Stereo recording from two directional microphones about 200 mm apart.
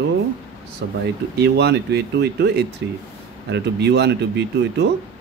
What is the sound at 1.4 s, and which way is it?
Speech, 55° right (ahead or behind).